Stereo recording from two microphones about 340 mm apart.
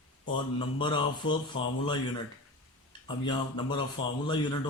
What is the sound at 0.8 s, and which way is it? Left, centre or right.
Speech, centre.